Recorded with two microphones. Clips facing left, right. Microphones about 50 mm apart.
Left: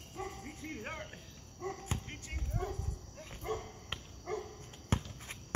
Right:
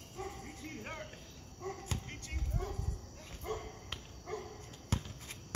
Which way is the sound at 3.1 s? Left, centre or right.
Centre.